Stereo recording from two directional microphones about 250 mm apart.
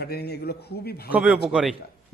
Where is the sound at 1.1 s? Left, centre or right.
Centre.